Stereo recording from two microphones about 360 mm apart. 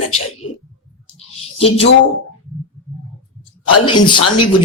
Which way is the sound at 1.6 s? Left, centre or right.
Centre.